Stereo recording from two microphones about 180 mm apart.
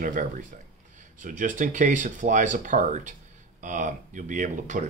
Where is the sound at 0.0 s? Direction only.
50° right (ahead or behind).